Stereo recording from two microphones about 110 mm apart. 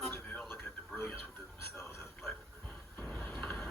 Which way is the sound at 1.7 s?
25° left (ahead or behind).